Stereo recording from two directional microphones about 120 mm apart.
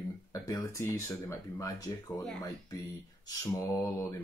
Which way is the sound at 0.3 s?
25° left (ahead or behind).